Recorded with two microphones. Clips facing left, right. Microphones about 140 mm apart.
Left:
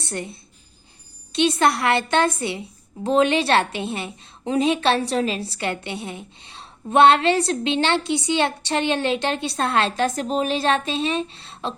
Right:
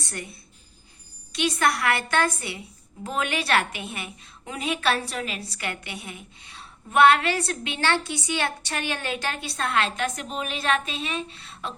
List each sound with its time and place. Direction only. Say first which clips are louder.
0.0 s a woman's voice: left 6 dB; 25° left (ahead or behind)